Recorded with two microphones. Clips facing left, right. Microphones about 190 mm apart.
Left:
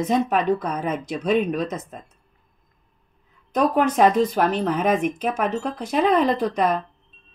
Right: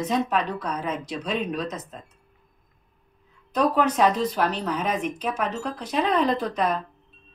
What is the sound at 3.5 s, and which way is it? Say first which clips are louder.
Speech: left 2 dB; 50° left (ahead or behind).